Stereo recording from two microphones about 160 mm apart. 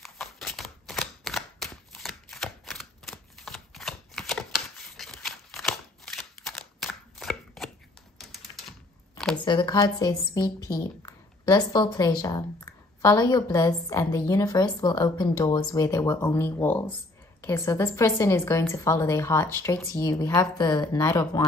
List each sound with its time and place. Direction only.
0.0 s typewriter: centre (ahead or behind)
8.2 s typing: centre (ahead or behind)
9.4 s a woman's voice: 30° left (ahead or behind)